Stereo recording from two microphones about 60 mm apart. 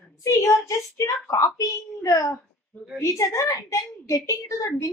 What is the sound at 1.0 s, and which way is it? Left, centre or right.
A woman's voice, left.